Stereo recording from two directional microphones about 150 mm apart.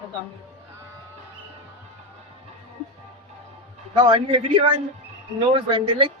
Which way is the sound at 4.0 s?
35° right (ahead or behind).